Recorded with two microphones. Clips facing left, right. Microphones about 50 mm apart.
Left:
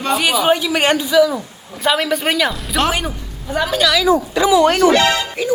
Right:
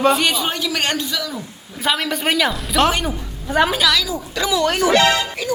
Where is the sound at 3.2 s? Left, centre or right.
Centre.